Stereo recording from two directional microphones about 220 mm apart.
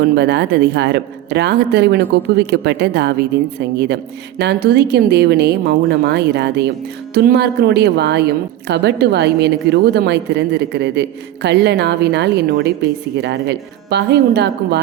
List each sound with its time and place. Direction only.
0.0 s a woman's voice: 45° right (ahead or behind)